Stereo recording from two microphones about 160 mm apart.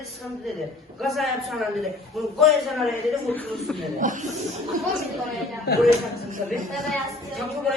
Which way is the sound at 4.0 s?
55° right (ahead or behind).